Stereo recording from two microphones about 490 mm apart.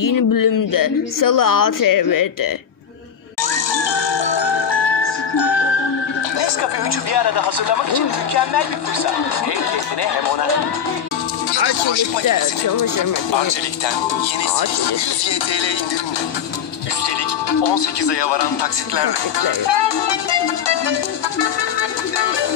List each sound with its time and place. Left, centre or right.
0.0 s speech: left
3.7 s music: left
6.4 s speech: left
10.2 s speech: left
11.5 s speech: left
12.3 s speech: left
13.3 s speech: left
17.5 s speech: left
21.4 s music: left